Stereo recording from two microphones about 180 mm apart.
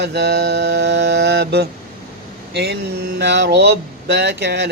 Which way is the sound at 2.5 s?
65° right (ahead or behind).